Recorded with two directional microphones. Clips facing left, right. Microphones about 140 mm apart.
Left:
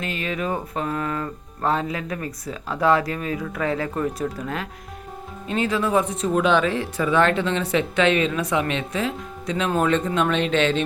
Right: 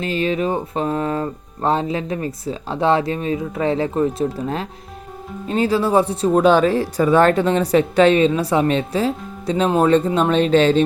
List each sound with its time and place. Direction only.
0.0 s speech: 30° right (ahead or behind)